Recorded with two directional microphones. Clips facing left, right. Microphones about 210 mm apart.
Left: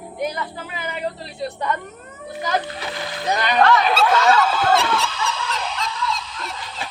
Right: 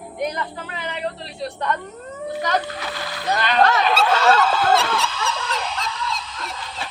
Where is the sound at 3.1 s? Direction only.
15° left (ahead or behind).